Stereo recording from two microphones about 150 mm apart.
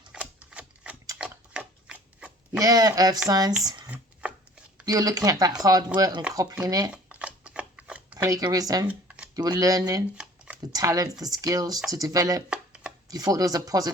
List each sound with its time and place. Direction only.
0.1 s typewriter: 10° right (ahead or behind)
1.2 s a sound: 5° right (ahead or behind)
2.5 s speech: 25° right (ahead or behind)
3.8 s chopping: 10° right (ahead or behind)
4.9 s speech: 25° right (ahead or behind)
6.9 s shuffling cards: 10° right (ahead or behind)
8.2 s speech: 25° right (ahead or behind)
8.9 s a sound: 10° right (ahead or behind)
9.3 s speech: 25° right (ahead or behind)
10.2 s shuffling cards: 5° right (ahead or behind)
10.6 s speech: 25° right (ahead or behind)
12.5 s chopping: 5° right (ahead or behind)
13.1 s speech: 25° right (ahead or behind)